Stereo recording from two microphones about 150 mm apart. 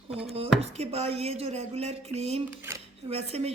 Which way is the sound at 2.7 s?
15° right (ahead or behind).